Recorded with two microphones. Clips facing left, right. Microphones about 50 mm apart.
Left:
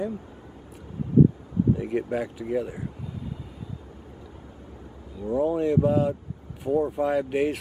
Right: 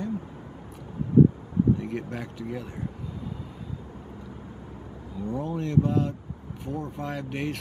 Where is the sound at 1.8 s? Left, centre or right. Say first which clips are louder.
Left 6 dB; centre.